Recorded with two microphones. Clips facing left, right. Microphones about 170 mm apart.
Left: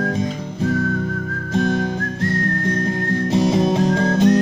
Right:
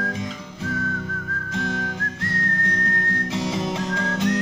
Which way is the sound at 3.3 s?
35° left (ahead or behind).